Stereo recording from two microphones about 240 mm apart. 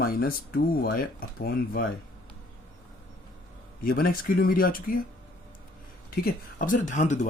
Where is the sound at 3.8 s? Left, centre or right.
Left.